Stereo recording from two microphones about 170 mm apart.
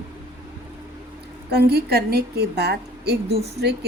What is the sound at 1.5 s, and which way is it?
A woman's voice, 70° right (ahead or behind).